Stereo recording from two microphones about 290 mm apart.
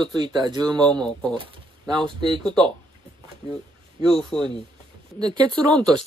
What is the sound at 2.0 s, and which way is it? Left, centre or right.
Speech, centre.